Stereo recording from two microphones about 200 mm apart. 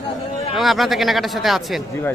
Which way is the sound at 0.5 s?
Centre (ahead or behind).